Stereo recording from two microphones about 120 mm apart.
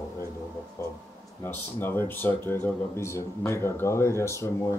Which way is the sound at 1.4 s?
20° left (ahead or behind).